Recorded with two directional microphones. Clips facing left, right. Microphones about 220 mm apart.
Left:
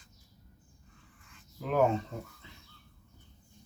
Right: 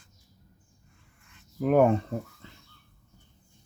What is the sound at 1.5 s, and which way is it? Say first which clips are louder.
Speech: right 6 dB; 55° right (ahead or behind).